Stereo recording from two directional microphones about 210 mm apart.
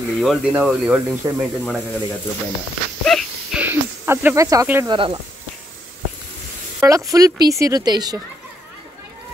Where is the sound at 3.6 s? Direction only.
10° right (ahead or behind).